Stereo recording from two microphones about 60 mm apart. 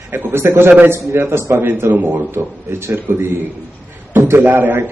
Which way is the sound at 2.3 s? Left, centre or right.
Right.